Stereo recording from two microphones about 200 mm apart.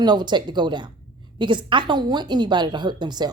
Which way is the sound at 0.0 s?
20° right (ahead or behind).